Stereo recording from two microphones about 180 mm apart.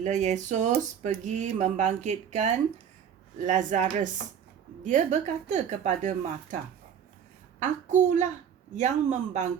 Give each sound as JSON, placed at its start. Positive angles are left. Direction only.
{"t": 0.0, "sound": "speech", "side_deg": -40}
{"t": 7.6, "sound": "speech", "side_deg": -40}